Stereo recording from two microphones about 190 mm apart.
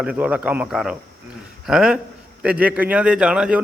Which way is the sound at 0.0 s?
5° right (ahead or behind).